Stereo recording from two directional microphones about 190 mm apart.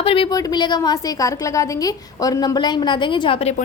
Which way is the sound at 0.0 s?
30° left (ahead or behind).